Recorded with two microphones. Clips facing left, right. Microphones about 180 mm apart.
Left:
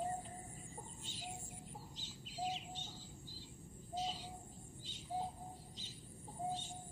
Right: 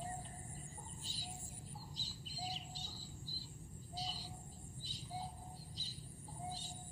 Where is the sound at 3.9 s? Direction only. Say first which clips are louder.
Left 5 dB; 35° right (ahead or behind).